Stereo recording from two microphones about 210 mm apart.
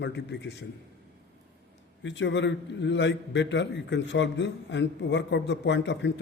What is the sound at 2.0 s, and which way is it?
A man's voice, 60° left (ahead or behind).